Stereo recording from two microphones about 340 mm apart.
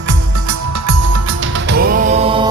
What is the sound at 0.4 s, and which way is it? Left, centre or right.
Music, right.